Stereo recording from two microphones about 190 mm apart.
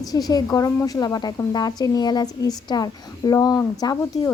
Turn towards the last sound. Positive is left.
turn(degrees=20)  # may be behind; listen again after turning